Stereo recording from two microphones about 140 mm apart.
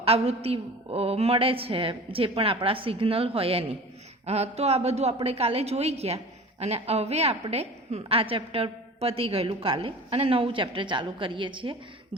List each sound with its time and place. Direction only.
0.0 s a woman's voice: 45° right (ahead or behind)